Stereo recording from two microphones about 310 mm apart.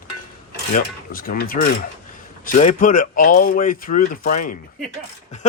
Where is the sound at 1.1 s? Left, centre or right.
Left.